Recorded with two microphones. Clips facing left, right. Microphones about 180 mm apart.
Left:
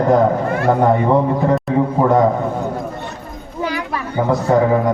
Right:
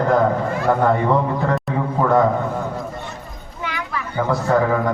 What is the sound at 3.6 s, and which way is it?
Children playing, 35° left (ahead or behind).